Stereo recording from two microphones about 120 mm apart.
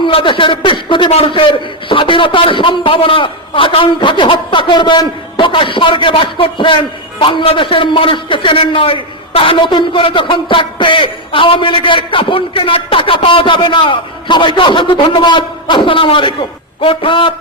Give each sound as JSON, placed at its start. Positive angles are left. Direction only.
{"t": 0.0, "sound": "a man's voice", "side_deg": 45}